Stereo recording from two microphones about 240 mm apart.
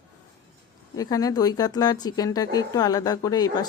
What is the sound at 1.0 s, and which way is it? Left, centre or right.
Speech, centre.